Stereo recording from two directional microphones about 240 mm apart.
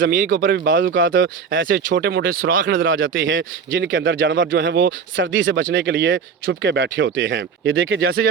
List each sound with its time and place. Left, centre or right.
0.1 s speech: right
1.6 s speech: right
3.2 s speech: right